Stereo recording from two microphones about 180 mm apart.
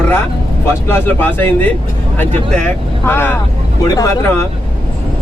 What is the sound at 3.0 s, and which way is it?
Speech, 10° left (ahead or behind).